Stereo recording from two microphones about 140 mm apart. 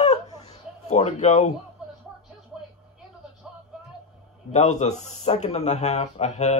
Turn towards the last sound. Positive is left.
turn(degrees=55)  # may be behind; listen again after turning